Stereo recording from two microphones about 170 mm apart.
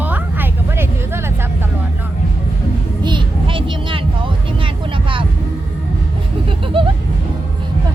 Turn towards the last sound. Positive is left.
turn(degrees=-30)  # may be behind; listen again after turning